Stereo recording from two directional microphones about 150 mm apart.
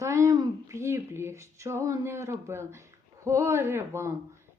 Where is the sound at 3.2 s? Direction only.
20° right (ahead or behind).